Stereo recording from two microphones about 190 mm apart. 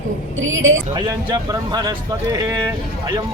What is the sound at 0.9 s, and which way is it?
Speech, 20° right (ahead or behind).